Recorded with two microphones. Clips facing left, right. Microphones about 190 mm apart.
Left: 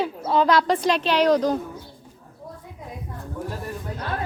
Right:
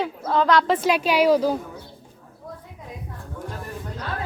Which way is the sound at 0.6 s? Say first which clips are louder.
Right 1 dB; 5° right (ahead or behind).